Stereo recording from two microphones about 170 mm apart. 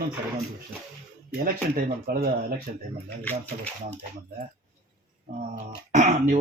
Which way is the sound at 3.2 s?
10° left (ahead or behind).